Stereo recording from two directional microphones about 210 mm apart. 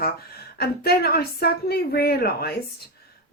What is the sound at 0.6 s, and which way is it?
Speech, 45° left (ahead or behind).